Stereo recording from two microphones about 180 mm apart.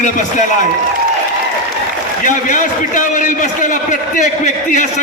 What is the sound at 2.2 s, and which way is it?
A man's voice, 45° left (ahead or behind).